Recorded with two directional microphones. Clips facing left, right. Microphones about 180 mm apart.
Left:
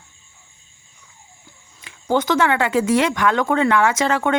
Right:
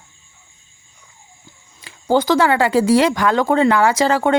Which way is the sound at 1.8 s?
35° right (ahead or behind).